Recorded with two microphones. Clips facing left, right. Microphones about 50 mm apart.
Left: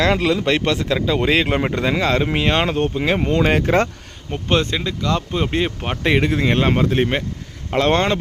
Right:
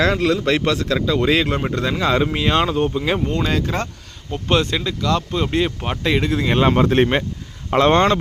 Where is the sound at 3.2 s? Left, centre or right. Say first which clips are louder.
Left 4 dB; left.